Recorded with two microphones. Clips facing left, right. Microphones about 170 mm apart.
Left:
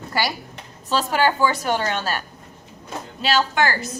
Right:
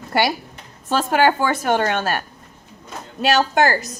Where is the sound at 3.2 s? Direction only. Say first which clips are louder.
Right 4 dB; 45° right (ahead or behind).